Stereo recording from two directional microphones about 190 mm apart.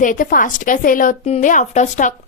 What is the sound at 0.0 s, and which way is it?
A woman's voice, 45° left (ahead or behind).